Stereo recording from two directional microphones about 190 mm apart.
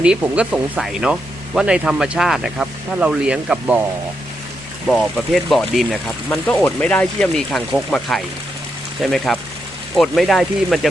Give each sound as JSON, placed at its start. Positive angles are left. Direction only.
{"t": 0.0, "sound": "speech", "side_deg": -5}
{"t": 4.9, "sound": "speech", "side_deg": 0}